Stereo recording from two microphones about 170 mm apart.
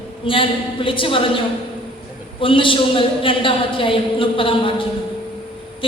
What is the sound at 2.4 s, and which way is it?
A woman's voice, 30° left (ahead or behind).